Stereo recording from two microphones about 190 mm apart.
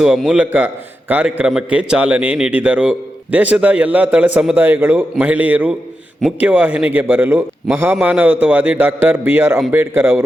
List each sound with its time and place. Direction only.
0.0 s speech: 5° right (ahead or behind)